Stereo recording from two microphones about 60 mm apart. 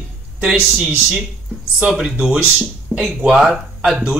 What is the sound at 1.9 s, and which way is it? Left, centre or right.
Speech, centre.